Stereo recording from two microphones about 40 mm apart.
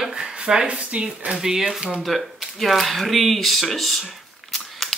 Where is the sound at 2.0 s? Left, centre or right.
Centre.